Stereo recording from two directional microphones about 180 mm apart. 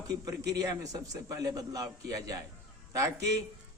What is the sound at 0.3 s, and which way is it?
A man's voice, 20° right (ahead or behind).